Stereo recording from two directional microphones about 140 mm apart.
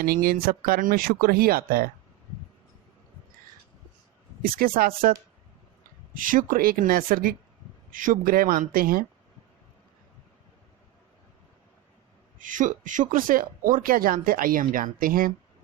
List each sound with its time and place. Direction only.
0.0 s speech: 90° right
4.4 s speech: 90° right
6.1 s speech: 75° right (ahead or behind)
7.9 s speech: 75° right (ahead or behind); by 9.0 s 90° right
12.4 s speech: 70° right (ahead or behind); by 15.3 s 90° right